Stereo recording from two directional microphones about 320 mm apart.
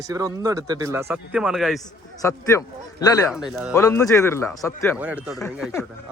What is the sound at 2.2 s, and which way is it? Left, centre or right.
Speech, centre.